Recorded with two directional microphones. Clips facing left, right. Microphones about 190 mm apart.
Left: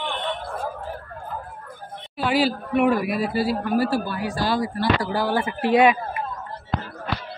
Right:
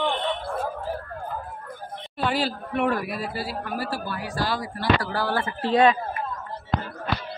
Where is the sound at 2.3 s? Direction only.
10° left (ahead or behind).